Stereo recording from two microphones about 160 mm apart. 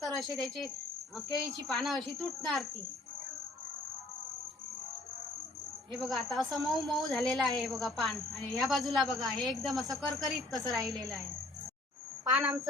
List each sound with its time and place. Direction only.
0.0 s a woman's voice: centre (ahead or behind)
6.0 s a woman's voice: centre (ahead or behind)
12.3 s a woman's voice: 20° right (ahead or behind)